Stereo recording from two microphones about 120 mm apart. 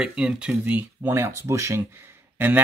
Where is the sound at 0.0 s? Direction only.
10° right (ahead or behind).